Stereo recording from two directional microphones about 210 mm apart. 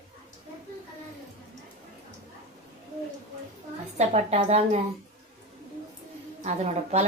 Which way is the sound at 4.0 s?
30° right (ahead or behind).